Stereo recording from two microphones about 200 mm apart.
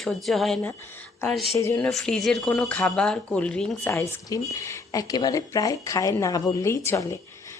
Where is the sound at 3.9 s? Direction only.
15° left (ahead or behind).